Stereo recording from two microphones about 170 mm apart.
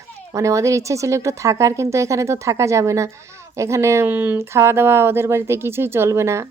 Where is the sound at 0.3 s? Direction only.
20° right (ahead or behind).